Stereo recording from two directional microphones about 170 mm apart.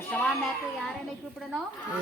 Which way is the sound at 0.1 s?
10° left (ahead or behind).